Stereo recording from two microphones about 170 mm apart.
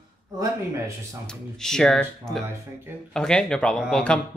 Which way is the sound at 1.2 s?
5° left (ahead or behind).